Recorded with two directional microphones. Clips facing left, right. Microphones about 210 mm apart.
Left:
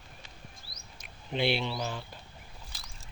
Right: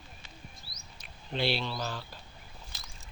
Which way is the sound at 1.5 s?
15° left (ahead or behind).